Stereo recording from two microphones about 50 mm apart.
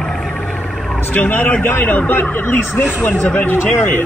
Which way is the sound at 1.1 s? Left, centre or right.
Left.